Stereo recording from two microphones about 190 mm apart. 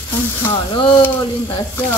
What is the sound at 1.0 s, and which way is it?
Speech, 10° left (ahead or behind).